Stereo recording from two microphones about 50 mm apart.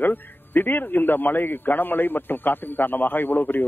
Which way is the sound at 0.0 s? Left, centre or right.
Left.